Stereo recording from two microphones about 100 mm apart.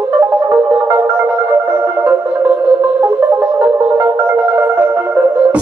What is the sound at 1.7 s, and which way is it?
Music, 15° right (ahead or behind).